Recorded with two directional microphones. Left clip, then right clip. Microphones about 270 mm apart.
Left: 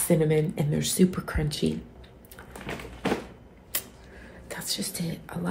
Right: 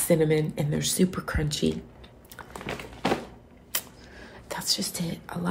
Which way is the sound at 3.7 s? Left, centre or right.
Centre.